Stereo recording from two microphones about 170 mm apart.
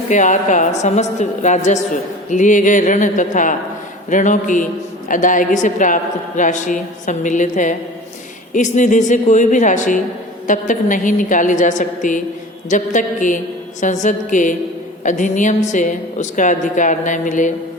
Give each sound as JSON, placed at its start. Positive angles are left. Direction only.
{"t": 0.1, "sound": "a man's voice", "side_deg": 45}